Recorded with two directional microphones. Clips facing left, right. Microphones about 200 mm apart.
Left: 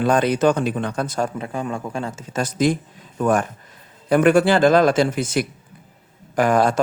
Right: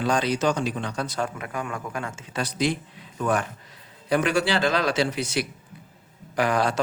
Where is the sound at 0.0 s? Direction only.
55° left (ahead or behind).